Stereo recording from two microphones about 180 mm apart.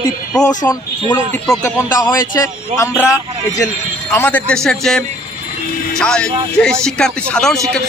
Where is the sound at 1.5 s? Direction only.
20° left (ahead or behind).